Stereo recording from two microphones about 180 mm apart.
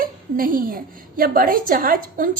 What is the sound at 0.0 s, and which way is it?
A woman's voice, 50° right (ahead or behind).